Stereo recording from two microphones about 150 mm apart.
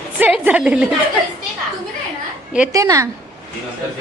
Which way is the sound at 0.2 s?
10° right (ahead or behind).